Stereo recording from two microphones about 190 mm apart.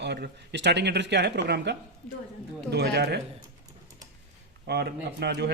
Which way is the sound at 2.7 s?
60° right (ahead or behind).